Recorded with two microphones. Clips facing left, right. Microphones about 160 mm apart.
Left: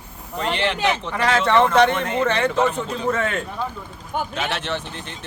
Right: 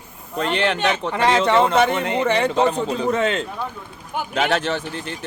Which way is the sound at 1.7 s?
5° right (ahead or behind).